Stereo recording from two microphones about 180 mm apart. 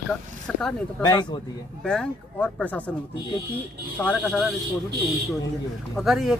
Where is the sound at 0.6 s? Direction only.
5° left (ahead or behind).